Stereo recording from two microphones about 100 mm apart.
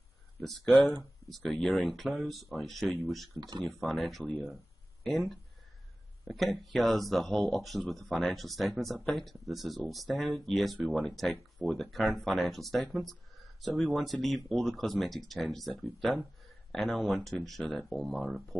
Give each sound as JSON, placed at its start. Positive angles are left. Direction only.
{"t": 0.4, "sound": "speech", "side_deg": 0}
{"t": 3.3, "sound": "speech", "side_deg": -45}
{"t": 3.8, "sound": "speech", "side_deg": 0}
{"t": 4.2, "sound": "speech", "side_deg": 15}
{"t": 5.0, "sound": "speech", "side_deg": 0}